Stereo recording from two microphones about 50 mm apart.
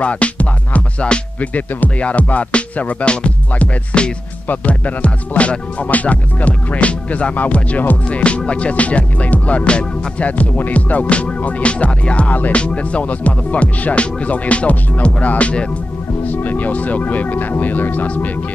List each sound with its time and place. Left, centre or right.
0.0 s music: left
8.2 s music: left
16.5 s speech: left